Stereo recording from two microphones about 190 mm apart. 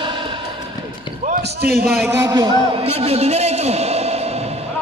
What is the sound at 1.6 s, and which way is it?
Speech, 55° right (ahead or behind).